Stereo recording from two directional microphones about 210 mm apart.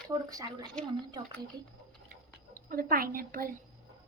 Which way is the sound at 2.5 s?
45° right (ahead or behind).